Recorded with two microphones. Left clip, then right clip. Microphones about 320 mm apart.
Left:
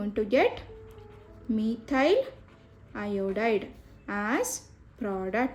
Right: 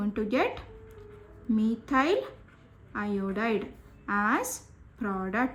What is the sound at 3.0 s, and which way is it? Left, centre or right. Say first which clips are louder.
Speech: left 3 dB; centre.